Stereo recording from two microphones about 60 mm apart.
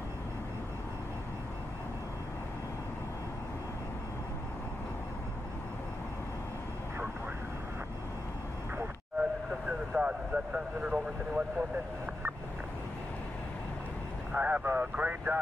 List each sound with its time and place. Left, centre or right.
9.5 s vehicle: right
14.3 s speech: right